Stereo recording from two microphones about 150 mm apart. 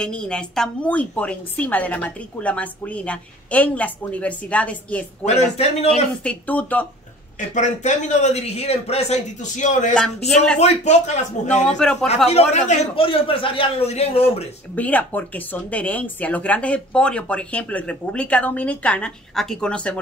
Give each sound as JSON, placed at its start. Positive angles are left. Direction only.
{"t": 0.0, "sound": "speech", "side_deg": 5}
{"t": 5.2, "sound": "a man's voice", "side_deg": 45}
{"t": 6.2, "sound": "speech", "side_deg": 10}
{"t": 7.3, "sound": "a man's voice", "side_deg": 55}
{"t": 9.9, "sound": "speech", "side_deg": 5}
{"t": 10.6, "sound": "a man's voice", "side_deg": 45}
{"t": 11.8, "sound": "speech", "side_deg": 5}
{"t": 12.3, "sound": "a man's voice", "side_deg": 45}
{"t": 12.9, "sound": "speech", "side_deg": 35}
{"t": 14.8, "sound": "speech", "side_deg": 10}